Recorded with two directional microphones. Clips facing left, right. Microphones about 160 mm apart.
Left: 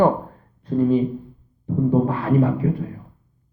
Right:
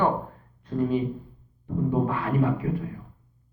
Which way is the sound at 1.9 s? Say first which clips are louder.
Left 7 dB; 35° left (ahead or behind).